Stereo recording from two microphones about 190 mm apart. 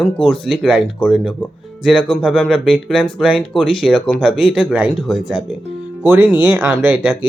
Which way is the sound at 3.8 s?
5° right (ahead or behind).